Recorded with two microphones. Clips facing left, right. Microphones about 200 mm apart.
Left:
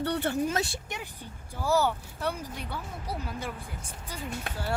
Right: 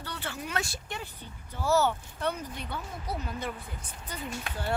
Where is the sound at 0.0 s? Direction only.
60° left (ahead or behind).